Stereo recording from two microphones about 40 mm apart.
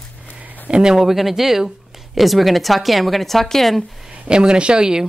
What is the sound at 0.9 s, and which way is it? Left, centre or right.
Speech, centre.